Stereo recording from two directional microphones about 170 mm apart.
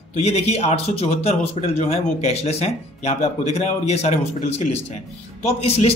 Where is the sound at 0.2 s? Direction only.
40° left (ahead or behind).